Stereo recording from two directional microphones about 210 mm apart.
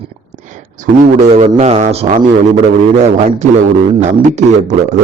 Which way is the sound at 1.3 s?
30° right (ahead or behind).